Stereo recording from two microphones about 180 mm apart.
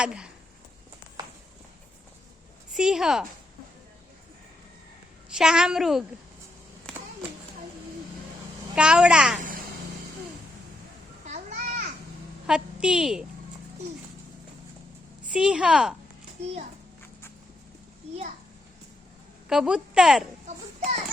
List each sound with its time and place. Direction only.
0.0 s a woman's voice: 5° right (ahead or behind)
2.7 s a woman's voice: 5° right (ahead or behind)
5.4 s a woman's voice: 5° right (ahead or behind)
6.9 s a sound: 5° left (ahead or behind)
8.7 s a woman's voice: 5° right (ahead or behind)
11.3 s a sound: 45° right (ahead or behind)
12.5 s a woman's voice: 5° right (ahead or behind)
15.3 s a woman's voice: 5° right (ahead or behind)
19.5 s a woman's voice: 5° right (ahead or behind)
20.5 s a child's voice: 40° right (ahead or behind)